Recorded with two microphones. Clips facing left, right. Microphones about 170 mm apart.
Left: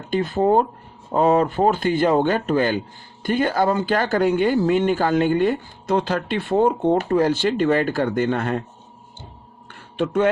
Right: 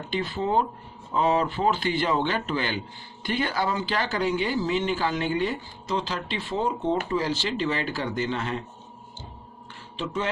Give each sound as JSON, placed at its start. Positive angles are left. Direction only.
{"t": 0.1, "sound": "speech", "side_deg": 50}
{"t": 9.6, "sound": "music", "side_deg": 55}